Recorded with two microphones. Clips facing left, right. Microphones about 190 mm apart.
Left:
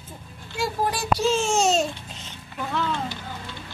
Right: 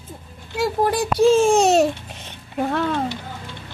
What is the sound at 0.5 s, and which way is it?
Babbling, 60° right (ahead or behind).